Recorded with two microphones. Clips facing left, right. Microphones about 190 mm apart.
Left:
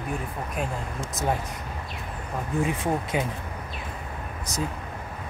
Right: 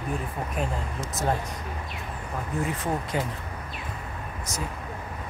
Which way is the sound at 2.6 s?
20° left (ahead or behind).